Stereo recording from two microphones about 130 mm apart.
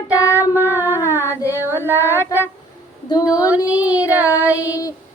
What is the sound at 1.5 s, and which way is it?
Female singing, 20° right (ahead or behind).